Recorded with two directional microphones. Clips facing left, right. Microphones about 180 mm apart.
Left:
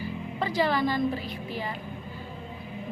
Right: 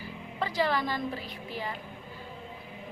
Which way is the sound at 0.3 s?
20° left (ahead or behind).